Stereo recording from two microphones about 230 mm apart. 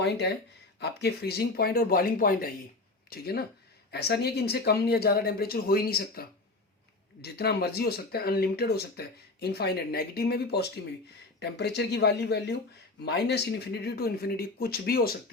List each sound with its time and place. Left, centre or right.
0.0 s speech: left